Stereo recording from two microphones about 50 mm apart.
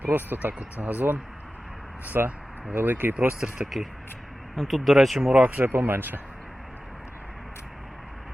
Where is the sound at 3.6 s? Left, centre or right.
Centre.